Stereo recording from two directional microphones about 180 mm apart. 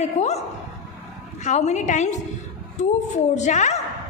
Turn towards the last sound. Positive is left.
turn(degrees=40)  # may be behind; listen again after turning